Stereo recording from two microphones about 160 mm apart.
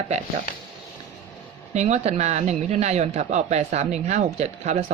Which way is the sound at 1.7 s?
45° right (ahead or behind).